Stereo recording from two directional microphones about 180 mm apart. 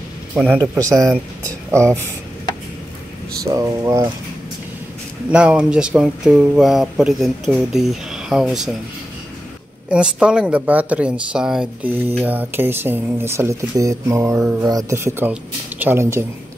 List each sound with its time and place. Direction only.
0.4 s speech: 10° right (ahead or behind)
3.4 s speech: 20° right (ahead or behind)
5.3 s speech: 5° right (ahead or behind)
9.8 s speech: 5° right (ahead or behind)